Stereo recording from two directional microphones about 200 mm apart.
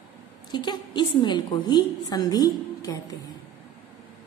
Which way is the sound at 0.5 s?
20° left (ahead or behind).